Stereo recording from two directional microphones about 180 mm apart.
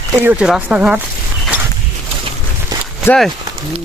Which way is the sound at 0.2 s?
10° right (ahead or behind).